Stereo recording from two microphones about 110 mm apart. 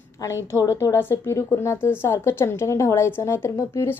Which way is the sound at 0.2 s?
30° left (ahead or behind).